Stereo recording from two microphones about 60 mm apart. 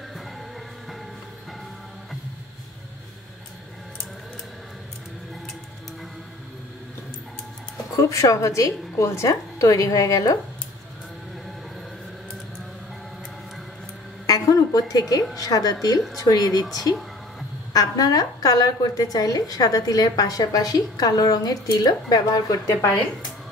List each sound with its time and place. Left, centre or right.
7.9 s a woman's voice: left
14.2 s a sound: left
15.3 s a woman's voice: left
17.7 s a woman's voice: left